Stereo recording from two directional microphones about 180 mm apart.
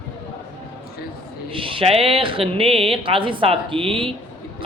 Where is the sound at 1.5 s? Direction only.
30° right (ahead or behind).